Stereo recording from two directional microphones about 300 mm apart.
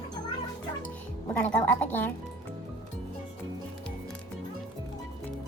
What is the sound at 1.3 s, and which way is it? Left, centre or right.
Speech, centre.